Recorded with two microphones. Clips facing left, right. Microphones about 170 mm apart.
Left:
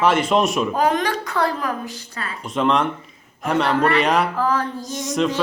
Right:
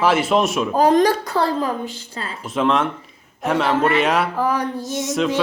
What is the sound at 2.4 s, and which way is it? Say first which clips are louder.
Speech: even; centre (ahead or behind).